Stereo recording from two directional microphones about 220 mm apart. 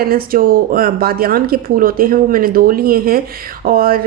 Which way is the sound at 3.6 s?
40° right (ahead or behind).